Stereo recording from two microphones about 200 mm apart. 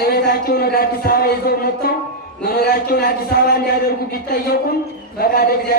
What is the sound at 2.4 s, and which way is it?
Speech, 50° left (ahead or behind).